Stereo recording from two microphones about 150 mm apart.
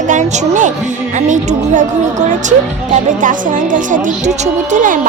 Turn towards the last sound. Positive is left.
turn(degrees=-55)  # may be behind; listen again after turning